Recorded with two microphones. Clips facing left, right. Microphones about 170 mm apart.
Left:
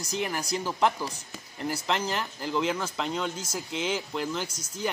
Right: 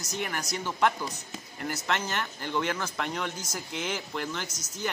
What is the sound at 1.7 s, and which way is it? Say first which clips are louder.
Speech: left 2 dB; 30° left (ahead or behind).